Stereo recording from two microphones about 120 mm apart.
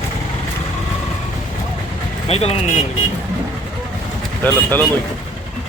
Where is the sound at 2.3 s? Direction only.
60° left (ahead or behind).